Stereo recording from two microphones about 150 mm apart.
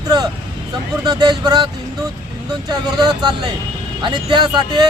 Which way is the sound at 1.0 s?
30° right (ahead or behind).